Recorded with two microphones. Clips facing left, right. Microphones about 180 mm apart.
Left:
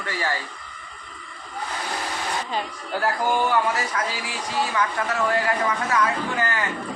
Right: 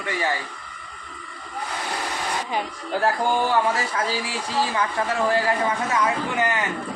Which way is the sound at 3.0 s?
30° right (ahead or behind).